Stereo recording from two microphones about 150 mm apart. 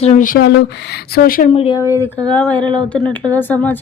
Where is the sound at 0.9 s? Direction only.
90° left.